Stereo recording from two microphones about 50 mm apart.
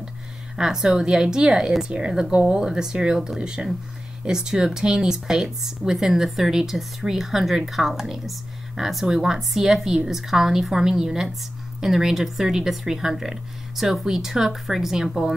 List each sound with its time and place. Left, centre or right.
0.6 s speech: centre